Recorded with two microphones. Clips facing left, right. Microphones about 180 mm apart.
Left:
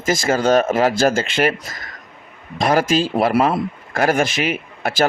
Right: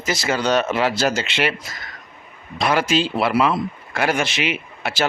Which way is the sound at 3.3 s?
50° left (ahead or behind).